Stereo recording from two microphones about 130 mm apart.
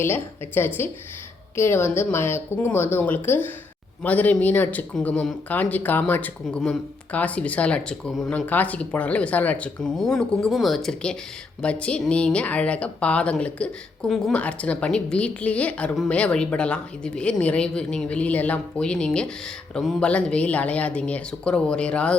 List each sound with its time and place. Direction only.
0.0 s a woman's voice: 15° left (ahead or behind)